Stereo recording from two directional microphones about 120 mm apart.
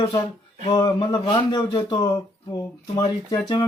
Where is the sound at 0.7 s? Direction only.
35° left (ahead or behind).